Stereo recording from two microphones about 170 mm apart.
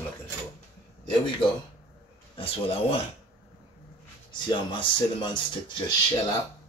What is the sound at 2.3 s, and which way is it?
Speech, 35° left (ahead or behind).